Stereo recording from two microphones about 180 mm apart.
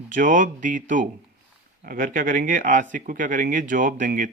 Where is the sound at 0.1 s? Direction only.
45° right (ahead or behind).